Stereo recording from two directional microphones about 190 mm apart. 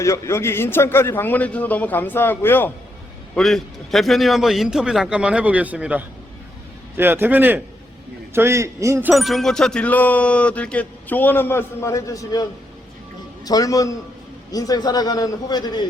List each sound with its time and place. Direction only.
0.0 s a man's voice: 15° left (ahead or behind)